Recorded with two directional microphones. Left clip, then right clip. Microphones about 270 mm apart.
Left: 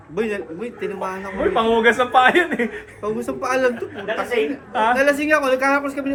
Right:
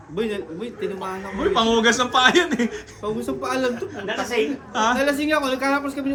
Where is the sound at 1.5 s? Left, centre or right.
Centre.